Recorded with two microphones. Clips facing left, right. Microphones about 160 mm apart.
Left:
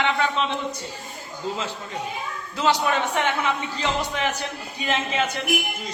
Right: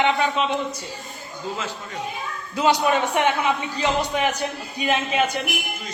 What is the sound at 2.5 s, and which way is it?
A man's voice, 15° right (ahead or behind).